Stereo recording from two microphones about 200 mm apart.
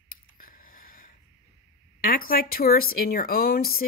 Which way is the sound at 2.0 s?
45° left (ahead or behind).